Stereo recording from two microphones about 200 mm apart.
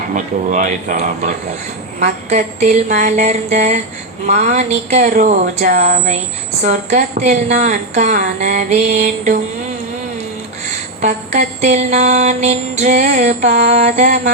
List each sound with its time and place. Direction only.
0.1 s mantra: 40° right (ahead or behind)
11.0 s mantra: 35° right (ahead or behind)